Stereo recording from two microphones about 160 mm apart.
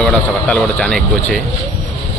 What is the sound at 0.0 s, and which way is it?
A man's voice, 5° left (ahead or behind).